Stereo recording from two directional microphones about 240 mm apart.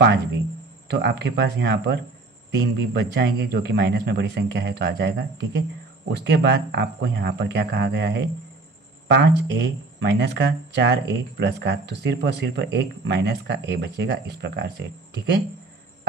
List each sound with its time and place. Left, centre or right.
0.8 s speech: right